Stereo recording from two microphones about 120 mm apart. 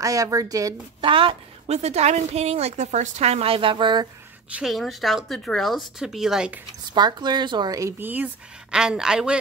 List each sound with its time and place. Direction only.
0.0 s a woman's voice: 30° right (ahead or behind)
1.0 s a woman's voice: 45° right (ahead or behind)
1.7 s a woman's voice: 65° right (ahead or behind); by 4.1 s 40° right (ahead or behind)
4.5 s a woman's voice: 5° right (ahead or behind)
6.9 s speech: 35° right (ahead or behind)
8.0 s a man's voice: 15° right (ahead or behind)